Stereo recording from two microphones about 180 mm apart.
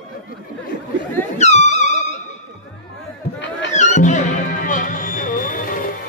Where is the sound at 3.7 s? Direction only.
40° left (ahead or behind).